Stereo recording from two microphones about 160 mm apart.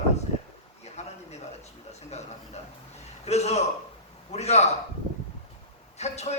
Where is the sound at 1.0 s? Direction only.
45° left (ahead or behind).